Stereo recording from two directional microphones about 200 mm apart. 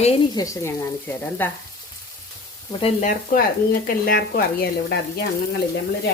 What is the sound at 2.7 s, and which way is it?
Speech, 30° left (ahead or behind).